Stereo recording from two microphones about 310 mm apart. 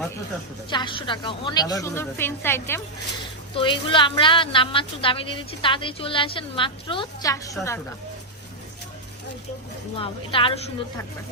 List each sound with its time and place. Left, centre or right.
0.7 s a woman's voice: centre
9.9 s a woman's voice: centre